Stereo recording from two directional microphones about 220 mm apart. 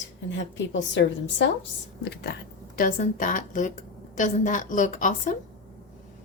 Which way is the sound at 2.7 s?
40° left (ahead or behind).